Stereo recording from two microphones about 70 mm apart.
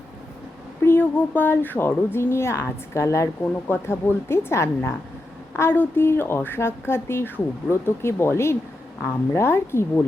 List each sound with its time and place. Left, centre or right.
0.9 s speech: left